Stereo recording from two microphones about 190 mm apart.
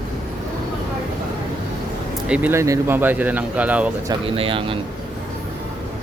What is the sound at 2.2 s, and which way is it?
Speech, 5° right (ahead or behind).